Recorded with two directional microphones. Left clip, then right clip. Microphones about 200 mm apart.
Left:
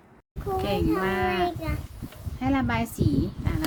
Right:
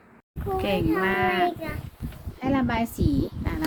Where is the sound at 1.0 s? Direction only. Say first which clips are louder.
Right 2 dB; 20° right (ahead or behind).